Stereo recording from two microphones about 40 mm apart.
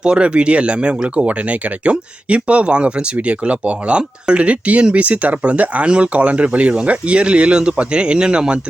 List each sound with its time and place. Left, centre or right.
0.0 s speech: right